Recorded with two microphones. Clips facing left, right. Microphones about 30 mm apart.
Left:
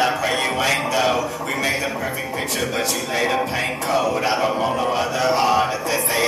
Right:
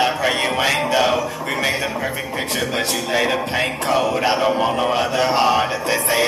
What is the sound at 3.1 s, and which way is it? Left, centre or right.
Speech, right.